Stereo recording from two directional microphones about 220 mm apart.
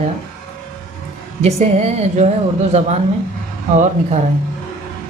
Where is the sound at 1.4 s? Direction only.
30° right (ahead or behind).